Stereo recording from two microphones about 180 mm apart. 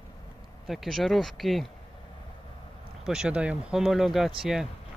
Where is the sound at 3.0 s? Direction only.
5° right (ahead or behind).